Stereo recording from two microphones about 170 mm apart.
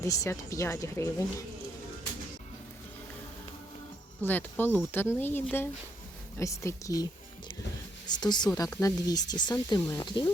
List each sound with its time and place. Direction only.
0.0 s speech: 20° left (ahead or behind)
4.2 s speech: 10° left (ahead or behind); by 10.2 s 25° left (ahead or behind)